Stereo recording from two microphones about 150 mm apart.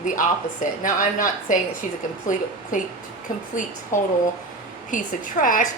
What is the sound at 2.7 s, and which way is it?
Speech, 60° left (ahead or behind).